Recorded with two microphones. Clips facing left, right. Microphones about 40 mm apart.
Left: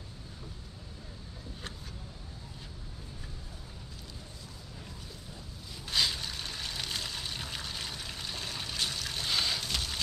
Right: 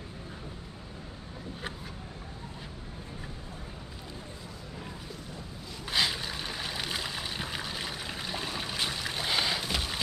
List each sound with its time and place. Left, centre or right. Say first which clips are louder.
5.9 s trickle: right 2 dB; centre